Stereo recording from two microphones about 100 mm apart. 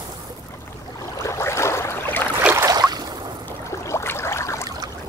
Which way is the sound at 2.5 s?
35° right (ahead or behind).